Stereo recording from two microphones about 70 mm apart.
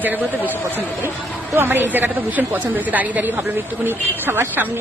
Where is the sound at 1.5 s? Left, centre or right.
Right.